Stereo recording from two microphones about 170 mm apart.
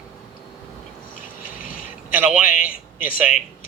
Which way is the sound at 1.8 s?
10° right (ahead or behind).